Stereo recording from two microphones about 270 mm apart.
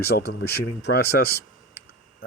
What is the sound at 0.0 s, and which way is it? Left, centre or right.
Speech, left.